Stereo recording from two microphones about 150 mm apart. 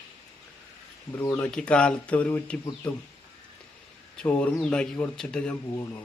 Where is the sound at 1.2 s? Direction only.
15° left (ahead or behind).